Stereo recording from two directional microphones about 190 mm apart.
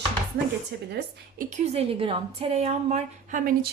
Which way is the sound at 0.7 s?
65° right (ahead or behind).